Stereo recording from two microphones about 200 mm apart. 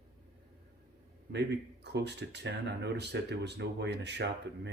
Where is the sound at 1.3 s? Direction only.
60° right (ahead or behind).